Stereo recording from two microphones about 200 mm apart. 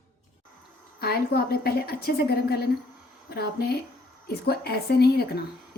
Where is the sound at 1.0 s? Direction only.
50° left (ahead or behind).